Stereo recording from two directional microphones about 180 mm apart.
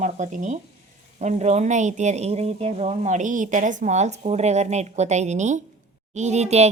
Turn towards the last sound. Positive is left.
turn(degrees=-35)  # may be behind; listen again after turning